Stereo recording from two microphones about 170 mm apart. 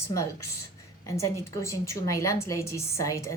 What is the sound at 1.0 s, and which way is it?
A woman's voice, 15° left (ahead or behind).